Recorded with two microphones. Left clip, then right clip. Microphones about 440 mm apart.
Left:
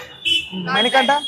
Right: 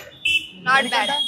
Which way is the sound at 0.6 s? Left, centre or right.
Right.